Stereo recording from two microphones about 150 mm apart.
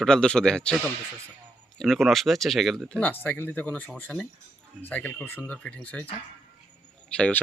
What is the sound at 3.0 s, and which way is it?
Speech, 10° left (ahead or behind).